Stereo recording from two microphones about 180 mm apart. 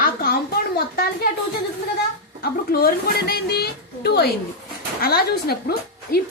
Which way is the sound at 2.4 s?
60° left (ahead or behind).